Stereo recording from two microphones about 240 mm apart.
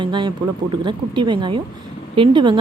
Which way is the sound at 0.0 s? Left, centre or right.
Centre.